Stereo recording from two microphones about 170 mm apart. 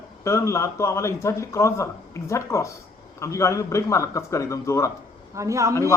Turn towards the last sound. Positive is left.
turn(degrees=15)  # may be behind; listen again after turning